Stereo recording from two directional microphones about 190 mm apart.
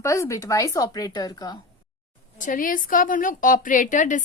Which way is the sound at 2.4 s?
45° left (ahead or behind).